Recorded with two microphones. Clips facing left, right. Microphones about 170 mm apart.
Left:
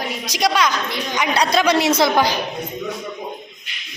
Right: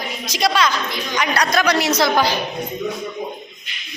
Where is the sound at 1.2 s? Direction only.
25° left (ahead or behind).